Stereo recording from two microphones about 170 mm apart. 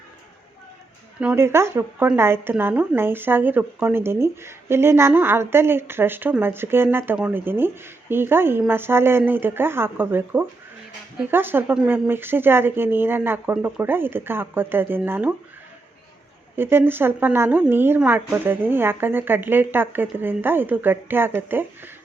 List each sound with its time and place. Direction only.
1.2 s a woman's voice: 10° right (ahead or behind)
16.6 s a woman's voice: 15° right (ahead or behind)